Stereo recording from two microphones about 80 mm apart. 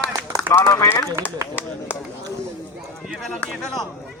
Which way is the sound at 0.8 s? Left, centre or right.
Left.